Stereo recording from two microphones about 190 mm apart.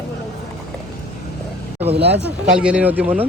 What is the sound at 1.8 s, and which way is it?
Speech, 10° right (ahead or behind).